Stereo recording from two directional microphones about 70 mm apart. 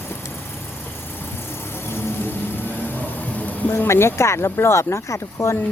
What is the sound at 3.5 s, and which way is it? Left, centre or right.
Speech, left.